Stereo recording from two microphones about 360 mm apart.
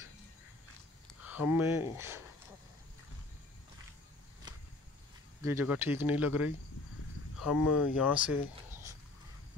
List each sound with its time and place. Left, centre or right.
1.2 s speech: centre
4.5 s a sound: centre
5.4 s speech: centre
7.7 s speech: left
8.0 s speech: centre